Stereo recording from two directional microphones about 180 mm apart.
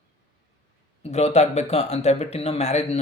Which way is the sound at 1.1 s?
35° left (ahead or behind).